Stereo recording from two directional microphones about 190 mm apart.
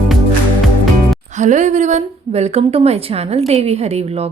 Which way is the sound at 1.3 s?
40° right (ahead or behind).